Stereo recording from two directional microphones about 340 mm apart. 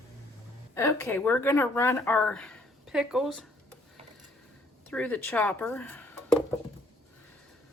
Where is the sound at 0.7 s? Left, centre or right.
Centre.